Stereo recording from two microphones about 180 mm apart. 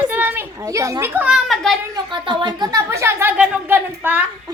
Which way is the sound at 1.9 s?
25° right (ahead or behind).